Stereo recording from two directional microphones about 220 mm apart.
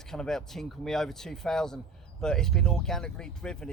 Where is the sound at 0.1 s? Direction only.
Centre (ahead or behind).